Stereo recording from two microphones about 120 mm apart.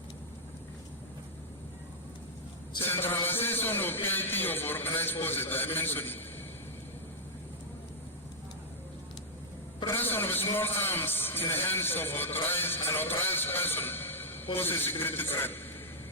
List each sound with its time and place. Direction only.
2.8 s a man's voice: 15° left (ahead or behind)
9.9 s a man's voice: 15° left (ahead or behind)